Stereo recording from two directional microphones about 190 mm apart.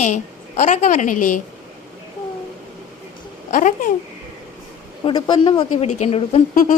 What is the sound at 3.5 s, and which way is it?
Speech, 45° left (ahead or behind).